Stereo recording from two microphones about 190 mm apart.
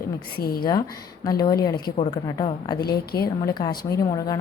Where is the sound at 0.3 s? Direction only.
50° left (ahead or behind).